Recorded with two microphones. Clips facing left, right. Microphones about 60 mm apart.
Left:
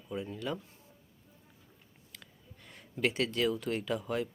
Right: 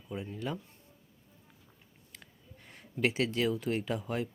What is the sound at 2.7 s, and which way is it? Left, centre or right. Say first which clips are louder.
Speech: right 1 dB; right.